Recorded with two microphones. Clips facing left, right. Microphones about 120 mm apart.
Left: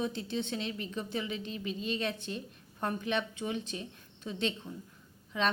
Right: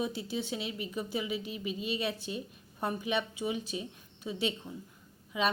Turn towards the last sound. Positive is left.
turn(degrees=-10)  # may be behind; listen again after turning